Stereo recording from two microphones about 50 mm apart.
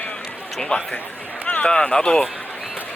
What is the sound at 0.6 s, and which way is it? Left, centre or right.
Speech, centre.